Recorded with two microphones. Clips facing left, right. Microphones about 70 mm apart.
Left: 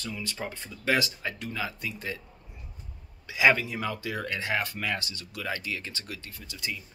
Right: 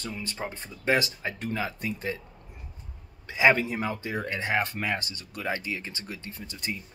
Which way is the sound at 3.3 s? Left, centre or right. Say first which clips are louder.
Right 1 dB; right.